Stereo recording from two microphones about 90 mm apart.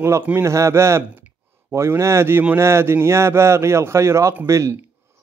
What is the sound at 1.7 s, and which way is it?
Speech, 30° right (ahead or behind).